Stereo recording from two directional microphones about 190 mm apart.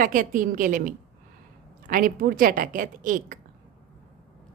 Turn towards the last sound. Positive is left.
turn(degrees=-45)  # may be behind; listen again after turning